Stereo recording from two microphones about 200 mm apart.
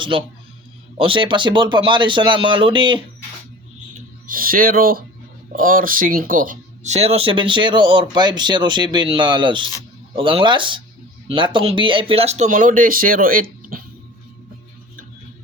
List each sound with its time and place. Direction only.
0.0 s speech: 25° right (ahead or behind)
4.3 s speech: 45° right (ahead or behind)